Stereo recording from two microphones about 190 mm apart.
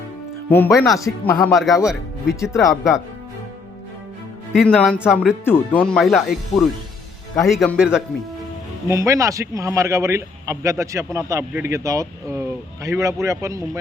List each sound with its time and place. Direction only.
0.4 s speech: 10° left (ahead or behind)
2.3 s speech: 15° left (ahead or behind)
4.5 s speech: centre (ahead or behind)
5.5 s speech: 10° left (ahead or behind)
8.9 s speech: 15° right (ahead or behind)